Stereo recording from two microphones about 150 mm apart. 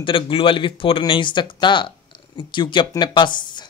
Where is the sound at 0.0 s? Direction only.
35° left (ahead or behind).